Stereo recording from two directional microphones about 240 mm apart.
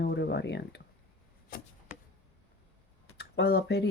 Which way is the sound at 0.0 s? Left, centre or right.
Left.